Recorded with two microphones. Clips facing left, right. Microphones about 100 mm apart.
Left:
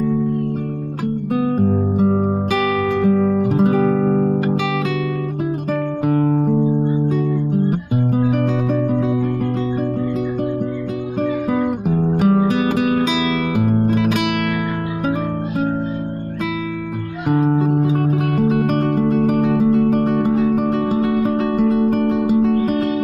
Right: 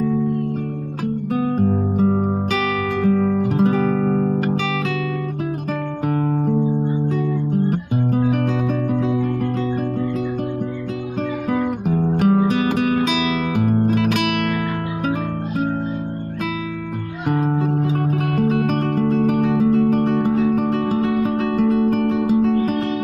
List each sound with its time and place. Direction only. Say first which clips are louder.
1.3 s music: left 2 dB; 15° left (ahead or behind)
2.6 s guitar: left 4 dB; 15° left (ahead or behind)
3.4 s music: left 2 dB; 5° left (ahead or behind)
3.7 s guitar: left 3 dB; 20° left (ahead or behind)
6.3 s music: left 3 dB; 15° left (ahead or behind)
11.5 s guitar: left 2 dB; 15° left (ahead or behind)
12.6 s music: left 1 dB; 15° left (ahead or behind)
17.4 s music: left 5 dB; 20° left (ahead or behind)
20.8 s music: left 2 dB; 15° left (ahead or behind)